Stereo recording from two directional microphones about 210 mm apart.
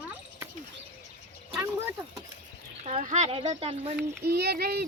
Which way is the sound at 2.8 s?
35° right (ahead or behind).